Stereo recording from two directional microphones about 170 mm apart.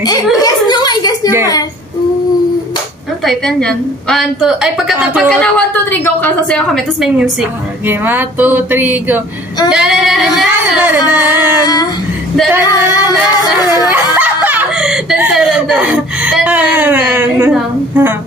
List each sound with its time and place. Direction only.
0.4 s a sound: 25° left (ahead or behind)
3.3 s a woman's voice: 5° left (ahead or behind)
7.9 s a woman's voice: 10° right (ahead or behind)
10.8 s music: 10° right (ahead or behind)
11.6 s child singing: 25° left (ahead or behind)
12.6 s singing: 20° left (ahead or behind)
13.8 s a sound: 10° right (ahead or behind)
17.6 s a woman's voice: 10° right (ahead or behind)